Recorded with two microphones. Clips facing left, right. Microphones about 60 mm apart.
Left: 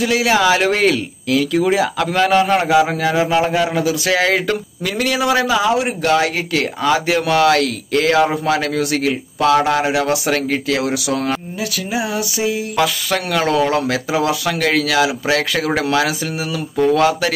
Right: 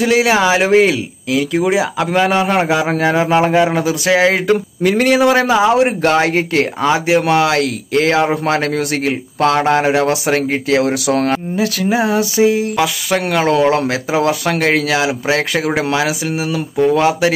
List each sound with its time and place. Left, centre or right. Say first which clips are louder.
0.0 s speech: right 2 dB; right
1.7 s speech: right 1 dB; centre
2.9 s speech: right 3 dB; right
4.8 s a man's voice: right 6 dB; right
8.5 s a man's voice: right 1 dB; right
12.7 s speech: right 2 dB; centre
13.3 s speech: right 3 dB; right